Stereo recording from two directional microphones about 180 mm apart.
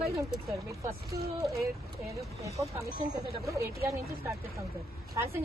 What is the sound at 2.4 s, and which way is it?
A man's voice, 15° right (ahead or behind).